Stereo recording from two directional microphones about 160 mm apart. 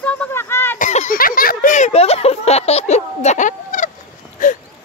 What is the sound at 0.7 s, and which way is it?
Speech, 50° left (ahead or behind).